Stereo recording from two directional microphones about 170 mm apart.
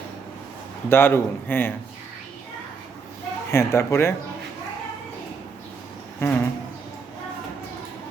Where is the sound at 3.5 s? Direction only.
15° left (ahead or behind).